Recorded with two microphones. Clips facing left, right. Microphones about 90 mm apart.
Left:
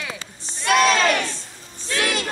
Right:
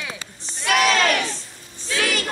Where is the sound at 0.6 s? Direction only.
5° right (ahead or behind).